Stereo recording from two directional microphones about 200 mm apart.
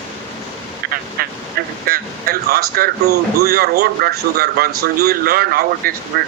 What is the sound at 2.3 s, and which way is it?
Speech, 50° right (ahead or behind).